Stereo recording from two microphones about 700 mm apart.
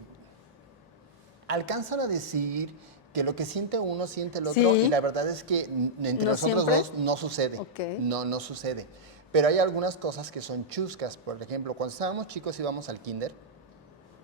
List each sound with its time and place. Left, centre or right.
1.5 s a woman's voice: right
7.7 s a man's voice: left
8.1 s a woman's voice: right